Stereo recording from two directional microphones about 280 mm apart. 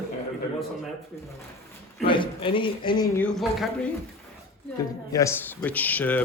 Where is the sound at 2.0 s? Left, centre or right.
Centre.